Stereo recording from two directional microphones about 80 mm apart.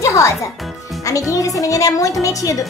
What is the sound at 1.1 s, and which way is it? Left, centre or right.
A woman's voice, left.